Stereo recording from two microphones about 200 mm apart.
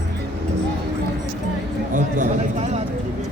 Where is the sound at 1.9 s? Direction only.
35° right (ahead or behind).